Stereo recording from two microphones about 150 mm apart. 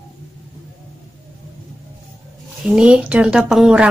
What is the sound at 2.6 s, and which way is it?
A woman's voice, 5° right (ahead or behind).